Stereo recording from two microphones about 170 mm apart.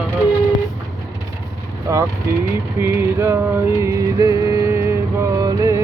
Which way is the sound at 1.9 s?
15° right (ahead or behind).